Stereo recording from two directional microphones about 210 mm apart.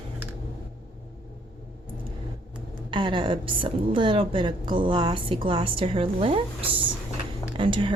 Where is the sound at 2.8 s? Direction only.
25° right (ahead or behind).